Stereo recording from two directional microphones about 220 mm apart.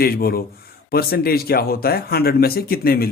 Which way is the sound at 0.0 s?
45° left (ahead or behind).